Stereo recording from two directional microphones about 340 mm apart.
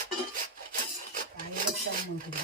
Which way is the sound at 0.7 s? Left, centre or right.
Right.